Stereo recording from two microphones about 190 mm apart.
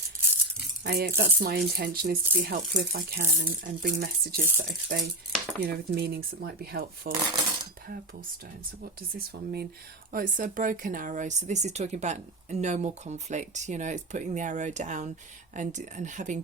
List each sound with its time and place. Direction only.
0.9 s speech: 55° right (ahead or behind)
5.3 s dishes: 5° left (ahead or behind)
5.6 s speech: 55° right (ahead or behind)
8.8 s speech: 55° right (ahead or behind)